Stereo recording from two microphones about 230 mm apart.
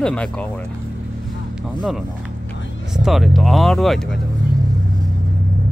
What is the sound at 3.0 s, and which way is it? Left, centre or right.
Speech, centre.